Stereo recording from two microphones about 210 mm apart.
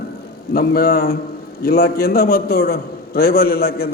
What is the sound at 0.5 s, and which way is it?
A man's voice, 45° left (ahead or behind).